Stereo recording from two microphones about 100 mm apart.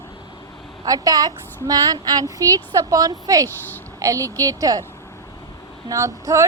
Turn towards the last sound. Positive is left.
turn(degrees=-30)  # may be behind; listen again after turning